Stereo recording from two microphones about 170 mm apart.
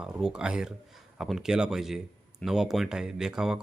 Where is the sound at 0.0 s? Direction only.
5° right (ahead or behind).